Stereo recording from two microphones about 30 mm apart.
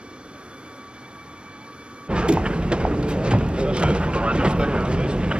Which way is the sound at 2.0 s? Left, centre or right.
Right.